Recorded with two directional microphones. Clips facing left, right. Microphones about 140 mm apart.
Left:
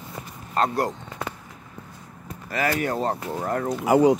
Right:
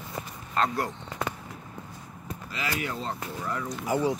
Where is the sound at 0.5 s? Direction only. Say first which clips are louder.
Left 4 dB; 40° left (ahead or behind).